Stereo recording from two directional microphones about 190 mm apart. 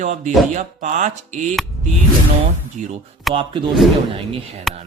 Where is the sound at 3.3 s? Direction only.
Centre (ahead or behind).